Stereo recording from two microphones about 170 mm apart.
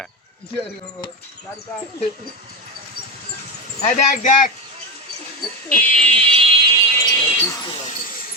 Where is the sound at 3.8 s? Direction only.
45° left (ahead or behind).